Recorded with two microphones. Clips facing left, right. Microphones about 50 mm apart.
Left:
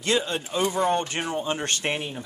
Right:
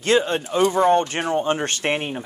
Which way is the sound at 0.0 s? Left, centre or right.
Right.